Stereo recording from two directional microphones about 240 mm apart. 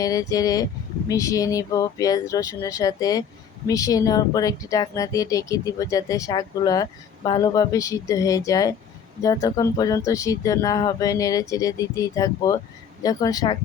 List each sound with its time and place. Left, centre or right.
0.0 s speech: centre